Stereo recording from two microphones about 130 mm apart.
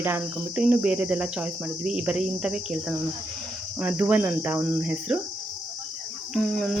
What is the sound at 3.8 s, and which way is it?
Cricket, 10° right (ahead or behind).